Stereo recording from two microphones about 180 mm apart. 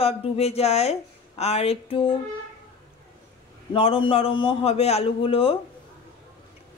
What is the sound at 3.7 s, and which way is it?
A man's voice, 30° left (ahead or behind).